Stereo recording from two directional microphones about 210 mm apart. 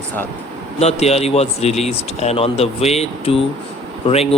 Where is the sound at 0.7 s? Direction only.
30° left (ahead or behind).